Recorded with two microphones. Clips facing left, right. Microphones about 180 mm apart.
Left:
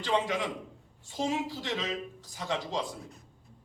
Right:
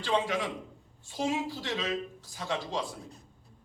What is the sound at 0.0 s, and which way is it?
A man's voice, 20° left (ahead or behind).